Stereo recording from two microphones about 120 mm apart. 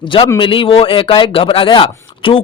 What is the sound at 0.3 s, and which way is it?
Speech, 45° left (ahead or behind).